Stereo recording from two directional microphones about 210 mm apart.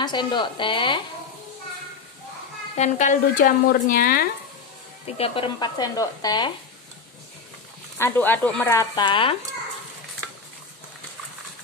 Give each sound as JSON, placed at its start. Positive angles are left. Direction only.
{"t": 0.0, "sound": "speech", "side_deg": 20}
{"t": 2.7, "sound": "speech", "side_deg": 35}
{"t": 5.0, "sound": "speech", "side_deg": 30}
{"t": 8.0, "sound": "speech", "side_deg": 10}
{"t": 8.9, "sound": "speech", "side_deg": 25}